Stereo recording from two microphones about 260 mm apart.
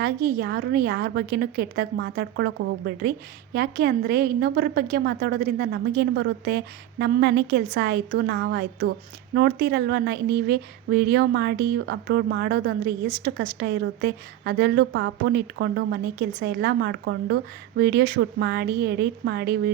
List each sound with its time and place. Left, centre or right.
0.0 s a woman's voice: right